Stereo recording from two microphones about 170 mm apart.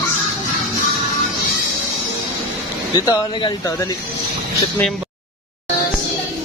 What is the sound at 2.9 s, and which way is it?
Speech, 25° left (ahead or behind).